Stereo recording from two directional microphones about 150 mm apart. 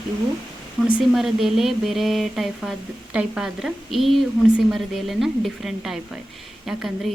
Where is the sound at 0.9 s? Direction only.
Centre (ahead or behind).